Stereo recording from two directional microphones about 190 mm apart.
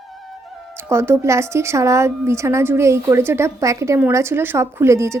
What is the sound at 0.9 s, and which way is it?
A woman's voice, 15° right (ahead or behind).